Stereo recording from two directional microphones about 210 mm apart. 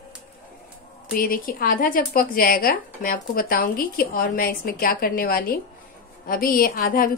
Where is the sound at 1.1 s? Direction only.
45° left (ahead or behind).